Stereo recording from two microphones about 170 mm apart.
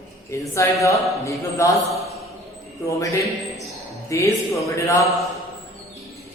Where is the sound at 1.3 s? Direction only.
20° left (ahead or behind).